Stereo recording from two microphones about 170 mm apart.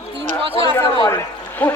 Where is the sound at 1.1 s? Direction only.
10° left (ahead or behind).